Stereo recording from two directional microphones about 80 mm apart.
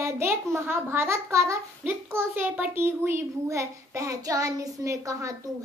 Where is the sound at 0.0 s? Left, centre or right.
Right.